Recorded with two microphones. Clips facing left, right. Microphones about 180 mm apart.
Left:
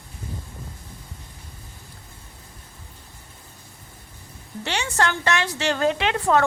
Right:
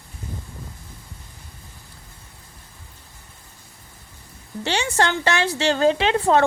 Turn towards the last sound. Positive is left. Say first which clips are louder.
# right 3 dB
turn(degrees=-30)  # may be behind; listen again after turning